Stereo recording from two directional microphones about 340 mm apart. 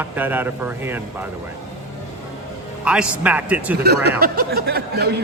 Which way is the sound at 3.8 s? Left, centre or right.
Right.